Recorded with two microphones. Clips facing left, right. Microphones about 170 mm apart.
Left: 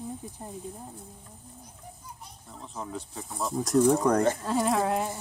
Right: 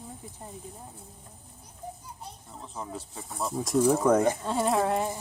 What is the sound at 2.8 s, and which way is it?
Speech, centre (ahead or behind).